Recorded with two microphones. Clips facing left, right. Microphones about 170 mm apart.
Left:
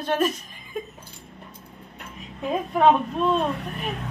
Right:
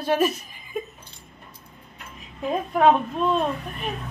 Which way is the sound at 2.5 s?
Centre (ahead or behind).